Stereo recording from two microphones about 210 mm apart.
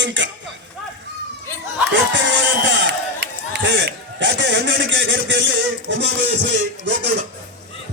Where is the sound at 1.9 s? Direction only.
60° right (ahead or behind).